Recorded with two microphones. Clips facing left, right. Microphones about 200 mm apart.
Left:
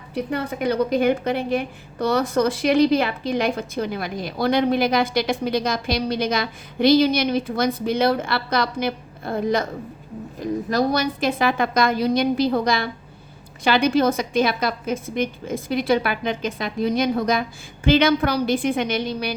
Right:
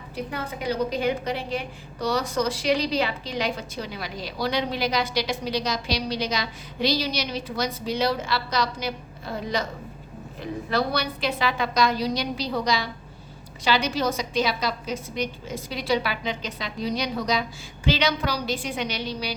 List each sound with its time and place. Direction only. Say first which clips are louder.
0.1 s a woman's voice: left 7 dB; 60° left (ahead or behind)